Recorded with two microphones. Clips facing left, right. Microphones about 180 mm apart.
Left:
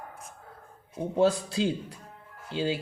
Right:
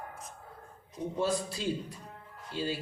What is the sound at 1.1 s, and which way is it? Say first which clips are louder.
A man's voice: left 8 dB; 75° left (ahead or behind).